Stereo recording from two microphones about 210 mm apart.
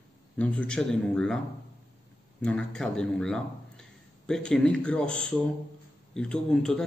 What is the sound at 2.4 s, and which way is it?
Speech, 5° left (ahead or behind).